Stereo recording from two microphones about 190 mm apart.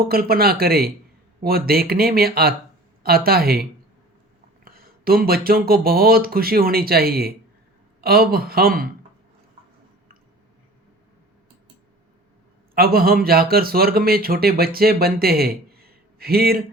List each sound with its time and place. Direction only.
0.1 s speech: 50° right (ahead or behind)
12.7 s speech: 50° right (ahead or behind)